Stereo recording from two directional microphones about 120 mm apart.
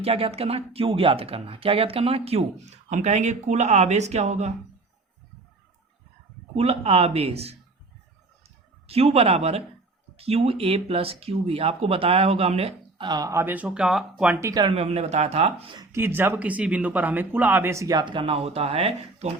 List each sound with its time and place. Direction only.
0.0 s speech: 55° right (ahead or behind)
6.6 s speech: 55° right (ahead or behind)
13.0 s speech: 35° right (ahead or behind)
13.3 s speech: 15° right (ahead or behind)
13.7 s speech: 5° right (ahead or behind)
14.4 s speech: 30° right (ahead or behind)
14.7 s speech: 60° right (ahead or behind)
15.9 s speech: 20° right (ahead or behind)
18.0 s speech: 45° right (ahead or behind)